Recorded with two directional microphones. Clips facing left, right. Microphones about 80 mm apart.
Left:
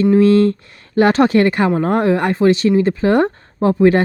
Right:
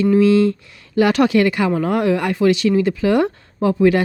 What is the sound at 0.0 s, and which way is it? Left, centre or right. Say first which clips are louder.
Speech: left 2 dB; left.